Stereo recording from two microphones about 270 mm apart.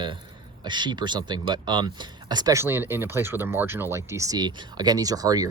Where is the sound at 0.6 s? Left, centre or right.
Centre.